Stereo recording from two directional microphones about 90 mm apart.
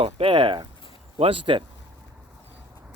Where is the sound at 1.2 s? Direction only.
80° right.